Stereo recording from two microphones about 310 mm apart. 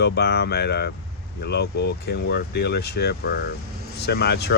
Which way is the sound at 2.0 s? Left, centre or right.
Left.